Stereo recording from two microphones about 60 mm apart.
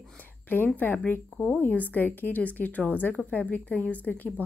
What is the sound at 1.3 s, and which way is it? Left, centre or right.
A woman's voice, centre.